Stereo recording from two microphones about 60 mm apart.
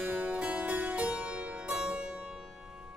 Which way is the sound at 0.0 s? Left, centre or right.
Right.